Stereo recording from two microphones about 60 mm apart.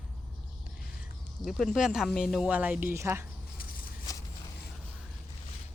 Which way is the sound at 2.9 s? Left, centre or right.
Right.